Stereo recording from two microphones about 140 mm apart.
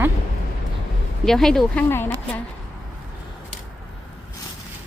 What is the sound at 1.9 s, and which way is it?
Speech, 15° left (ahead or behind).